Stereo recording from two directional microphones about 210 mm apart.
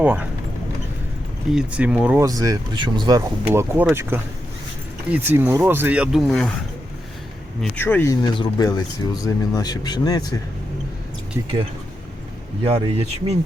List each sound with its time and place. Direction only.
0.0 s speech: 5° right (ahead or behind)
1.5 s speech: 5° right (ahead or behind)
5.1 s speech: 10° right (ahead or behind)
7.6 s speech: 10° left (ahead or behind)
12.6 s speech: 30° right (ahead or behind)